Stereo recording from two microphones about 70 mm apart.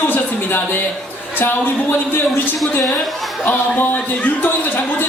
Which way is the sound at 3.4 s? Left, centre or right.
Left.